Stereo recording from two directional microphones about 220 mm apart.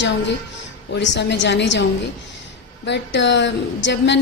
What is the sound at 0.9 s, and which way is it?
Speech, 50° left (ahead or behind).